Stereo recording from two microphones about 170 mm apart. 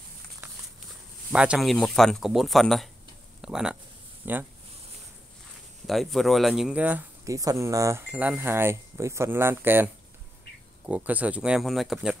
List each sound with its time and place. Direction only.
1.3 s speech: 5° right (ahead or behind)
5.9 s speech: centre (ahead or behind)
7.2 s speech: 20° right (ahead or behind)
10.9 s speech: 10° right (ahead or behind)